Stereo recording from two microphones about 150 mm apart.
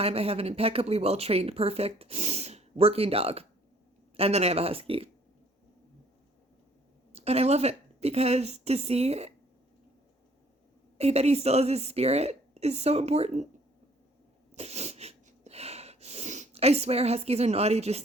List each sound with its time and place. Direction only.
0.0 s a woman's voice: 40° right (ahead or behind)
7.1 s a woman's voice: 45° right (ahead or behind)
10.9 s a woman's voice: 45° right (ahead or behind)
14.5 s sneeze: 45° right (ahead or behind)